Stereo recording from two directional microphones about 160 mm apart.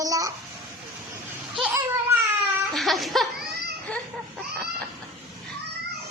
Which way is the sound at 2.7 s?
Centre (ahead or behind).